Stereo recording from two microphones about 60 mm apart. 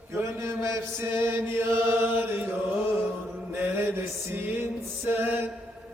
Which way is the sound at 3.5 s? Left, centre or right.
Right.